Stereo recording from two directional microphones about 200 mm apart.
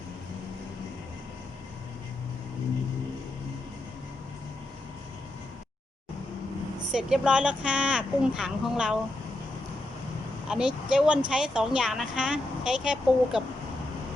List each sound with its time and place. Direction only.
6.9 s speech: 5° right (ahead or behind)
10.5 s speech: 5° right (ahead or behind)